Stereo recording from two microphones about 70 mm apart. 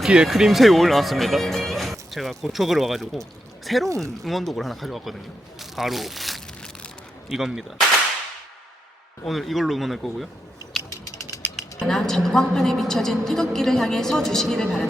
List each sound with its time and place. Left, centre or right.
0.0 s speech: centre
3.8 s speech: right
4.2 s a woman's voice: centre
9.2 s a woman's voice: centre
11.9 s a woman's voice: centre